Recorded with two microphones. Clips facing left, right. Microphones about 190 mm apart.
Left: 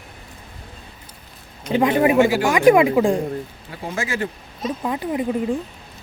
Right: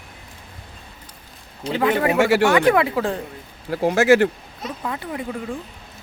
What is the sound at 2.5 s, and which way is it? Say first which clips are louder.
Speech: left 3 dB; 15° left (ahead or behind).